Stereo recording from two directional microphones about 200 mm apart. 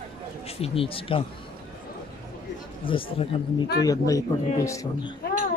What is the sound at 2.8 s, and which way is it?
A man's voice, 25° left (ahead or behind).